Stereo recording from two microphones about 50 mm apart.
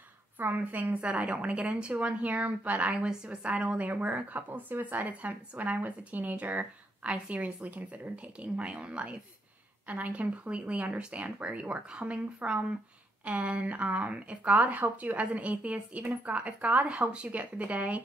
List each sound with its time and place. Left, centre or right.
0.4 s speech: right
2.9 s a woman's voice: centre